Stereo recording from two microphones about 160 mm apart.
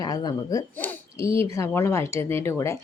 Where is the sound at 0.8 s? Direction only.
10° left (ahead or behind).